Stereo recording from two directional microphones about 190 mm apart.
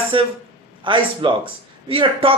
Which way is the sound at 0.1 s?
25° right (ahead or behind).